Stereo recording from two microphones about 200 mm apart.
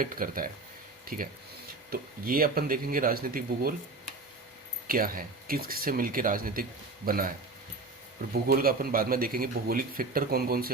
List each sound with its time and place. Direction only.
0.0 s speech: 45° right (ahead or behind)
4.9 s speech: 45° right (ahead or behind)